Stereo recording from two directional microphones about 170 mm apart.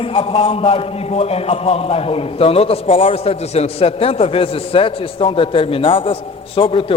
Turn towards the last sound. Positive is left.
turn(degrees=30)  # may be behind; listen again after turning